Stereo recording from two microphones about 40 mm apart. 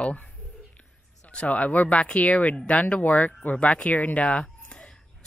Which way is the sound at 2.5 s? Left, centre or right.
Left.